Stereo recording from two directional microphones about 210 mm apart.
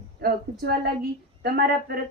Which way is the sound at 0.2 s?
45° right (ahead or behind).